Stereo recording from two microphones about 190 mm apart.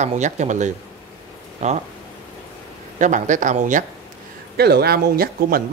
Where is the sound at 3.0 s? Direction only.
40° right (ahead or behind).